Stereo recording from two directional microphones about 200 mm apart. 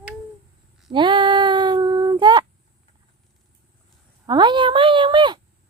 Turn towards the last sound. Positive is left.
turn(degrees=-25)  # may be behind; listen again after turning